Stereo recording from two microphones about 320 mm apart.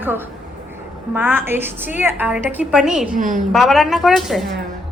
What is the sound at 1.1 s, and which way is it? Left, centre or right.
A woman's voice, centre.